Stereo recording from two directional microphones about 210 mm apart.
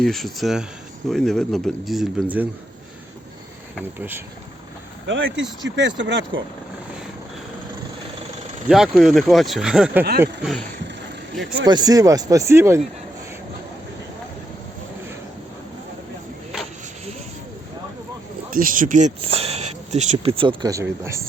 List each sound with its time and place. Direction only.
0.0 s speech: centre (ahead or behind)
3.9 s speech: 10° right (ahead or behind)
5.0 s speech: 60° right (ahead or behind)
8.6 s speech: centre (ahead or behind)
11.6 s speech: 20° right (ahead or behind)
18.5 s speech: 40° right (ahead or behind); by 21.2 s 15° right (ahead or behind)